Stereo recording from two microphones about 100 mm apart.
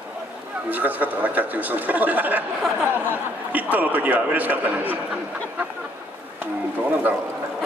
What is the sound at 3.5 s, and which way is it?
A man's voice, 15° right (ahead or behind).